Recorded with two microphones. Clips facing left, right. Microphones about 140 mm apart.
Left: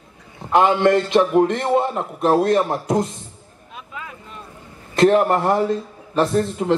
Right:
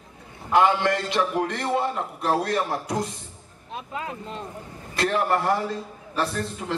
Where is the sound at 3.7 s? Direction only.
35° right (ahead or behind).